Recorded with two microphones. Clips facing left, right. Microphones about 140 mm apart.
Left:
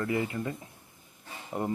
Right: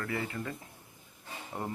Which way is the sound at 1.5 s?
10° left (ahead or behind).